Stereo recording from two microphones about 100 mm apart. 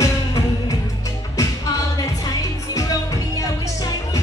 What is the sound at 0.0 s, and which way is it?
Music, 35° left (ahead or behind).